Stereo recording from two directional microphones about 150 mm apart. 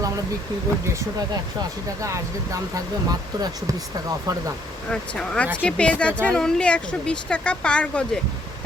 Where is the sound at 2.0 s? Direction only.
20° right (ahead or behind).